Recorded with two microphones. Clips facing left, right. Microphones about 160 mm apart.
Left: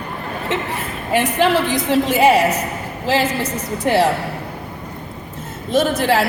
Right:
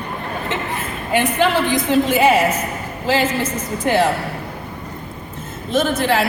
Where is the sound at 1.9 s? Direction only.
35° left (ahead or behind).